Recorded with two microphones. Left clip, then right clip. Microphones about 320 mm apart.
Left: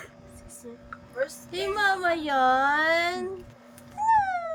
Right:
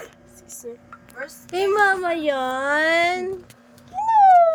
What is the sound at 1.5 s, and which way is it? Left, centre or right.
A woman's voice, centre.